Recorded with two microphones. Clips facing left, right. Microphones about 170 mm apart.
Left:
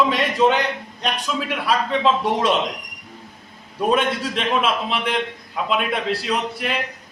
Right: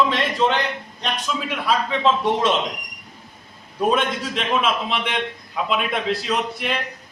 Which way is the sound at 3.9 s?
Centre (ahead or behind).